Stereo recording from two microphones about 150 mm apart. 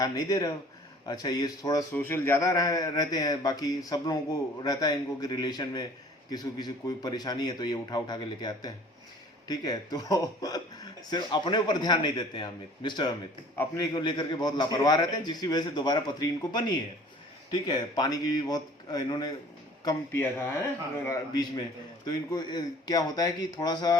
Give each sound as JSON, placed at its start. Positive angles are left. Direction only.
{"t": 0.0, "sound": "a man's voice", "side_deg": 25}
{"t": 1.9, "sound": "a man's voice", "side_deg": 15}
{"t": 21.0, "sound": "a man's voice", "side_deg": 25}